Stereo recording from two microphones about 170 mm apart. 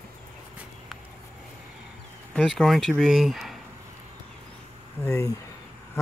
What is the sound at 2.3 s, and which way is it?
Speech, 5° left (ahead or behind).